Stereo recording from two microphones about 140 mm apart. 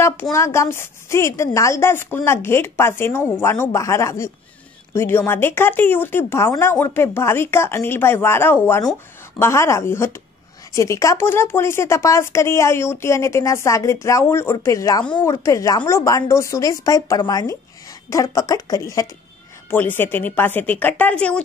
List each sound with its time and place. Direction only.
0.0 s speech: 20° left (ahead or behind)